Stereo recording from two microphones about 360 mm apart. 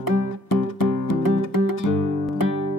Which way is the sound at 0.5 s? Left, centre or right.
Left.